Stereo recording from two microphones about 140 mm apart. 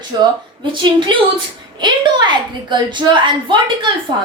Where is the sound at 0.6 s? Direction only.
35° right (ahead or behind).